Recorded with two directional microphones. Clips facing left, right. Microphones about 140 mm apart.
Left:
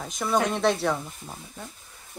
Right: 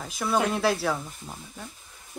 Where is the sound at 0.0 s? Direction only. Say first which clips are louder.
Left 1 dB; 5° right (ahead or behind).